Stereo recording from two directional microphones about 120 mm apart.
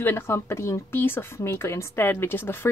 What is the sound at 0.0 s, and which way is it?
A woman's voice, 20° left (ahead or behind).